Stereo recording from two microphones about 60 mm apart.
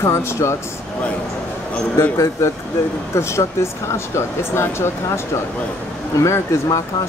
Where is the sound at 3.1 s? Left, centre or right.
Left.